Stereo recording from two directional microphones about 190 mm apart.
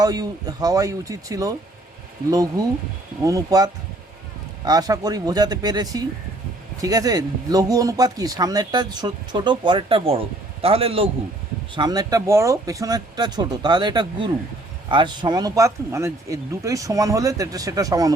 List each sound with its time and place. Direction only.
0.0 s speech: 20° right (ahead or behind)